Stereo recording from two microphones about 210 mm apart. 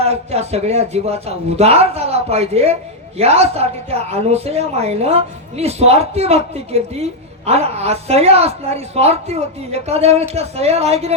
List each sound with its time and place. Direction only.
0.0 s a woman's voice: 30° right (ahead or behind)